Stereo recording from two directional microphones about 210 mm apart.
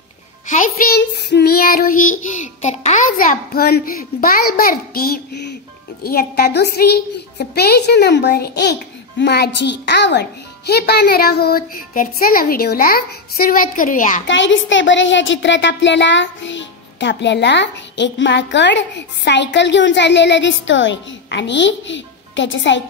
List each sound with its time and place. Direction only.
0.9 s child singing: 50° left (ahead or behind)
14.2 s speech: 60° left (ahead or behind)